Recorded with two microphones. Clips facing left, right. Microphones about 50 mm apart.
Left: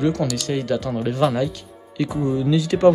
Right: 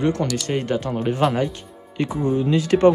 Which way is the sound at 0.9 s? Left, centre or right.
Centre.